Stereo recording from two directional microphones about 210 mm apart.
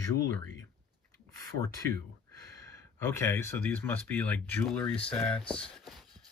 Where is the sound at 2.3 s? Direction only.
15° left (ahead or behind).